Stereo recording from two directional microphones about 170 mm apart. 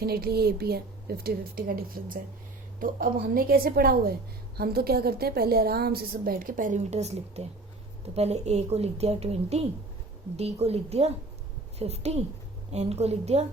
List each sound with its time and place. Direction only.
0.0 s a woman's voice: 65° right (ahead or behind); by 13.4 s 40° right (ahead or behind)